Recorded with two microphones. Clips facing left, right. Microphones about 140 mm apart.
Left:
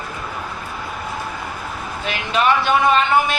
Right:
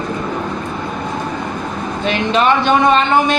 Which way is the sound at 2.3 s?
30° right (ahead or behind).